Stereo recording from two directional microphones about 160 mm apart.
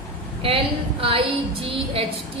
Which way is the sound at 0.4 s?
35° right (ahead or behind).